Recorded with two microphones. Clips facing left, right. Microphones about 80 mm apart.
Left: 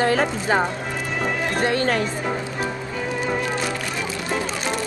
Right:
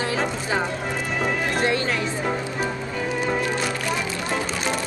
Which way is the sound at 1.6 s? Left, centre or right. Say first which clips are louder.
Left 5 dB; left.